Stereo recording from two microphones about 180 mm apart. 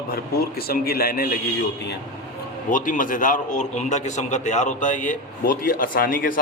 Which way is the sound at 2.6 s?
45° left (ahead or behind).